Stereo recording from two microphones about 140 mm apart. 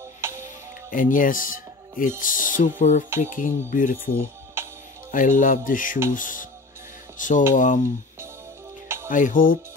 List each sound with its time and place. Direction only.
0.2 s music: 15° right (ahead or behind)
0.8 s speech: 75° left (ahead or behind)
4.6 s music: 15° right (ahead or behind)
5.1 s speech: 70° left (ahead or behind)
8.8 s music: 20° right (ahead or behind)
9.1 s speech: 70° left (ahead or behind)